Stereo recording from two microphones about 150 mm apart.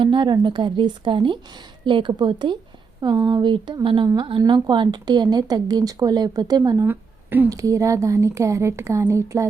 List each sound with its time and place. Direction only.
0.0 s a woman's voice: 30° right (ahead or behind)
6.8 s speech: 15° right (ahead or behind)